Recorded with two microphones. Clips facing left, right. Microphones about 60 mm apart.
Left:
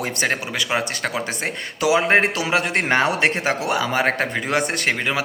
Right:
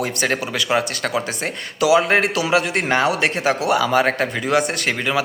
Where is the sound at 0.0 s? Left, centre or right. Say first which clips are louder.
Right 2 dB; left.